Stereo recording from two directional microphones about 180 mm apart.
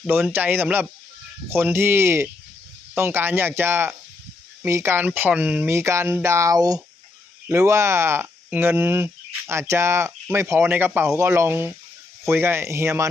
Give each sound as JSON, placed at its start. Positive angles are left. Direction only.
{"t": 0.3, "sound": "speech", "side_deg": -10}